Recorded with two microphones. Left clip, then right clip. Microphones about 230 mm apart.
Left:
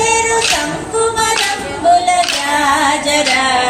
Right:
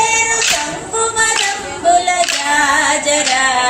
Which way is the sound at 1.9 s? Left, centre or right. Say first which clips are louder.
Left 1 dB; right.